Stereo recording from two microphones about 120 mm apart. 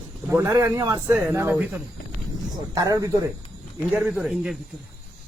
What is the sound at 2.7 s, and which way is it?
Speech, 30° right (ahead or behind).